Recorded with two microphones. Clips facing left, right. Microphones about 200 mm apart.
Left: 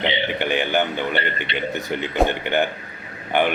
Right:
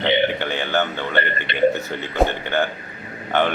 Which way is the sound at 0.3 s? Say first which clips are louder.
Left 1 dB; 15° left (ahead or behind).